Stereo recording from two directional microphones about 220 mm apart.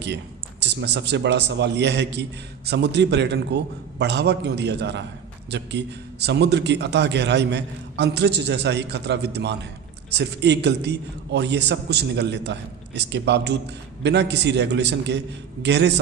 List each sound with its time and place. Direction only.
0.6 s a man's voice: 50° right (ahead or behind)